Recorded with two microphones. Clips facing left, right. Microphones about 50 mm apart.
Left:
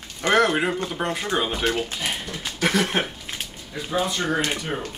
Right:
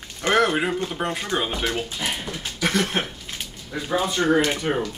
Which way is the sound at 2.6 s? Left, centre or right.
Centre.